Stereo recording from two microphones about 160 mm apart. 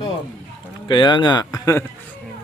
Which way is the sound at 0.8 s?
30° left (ahead or behind).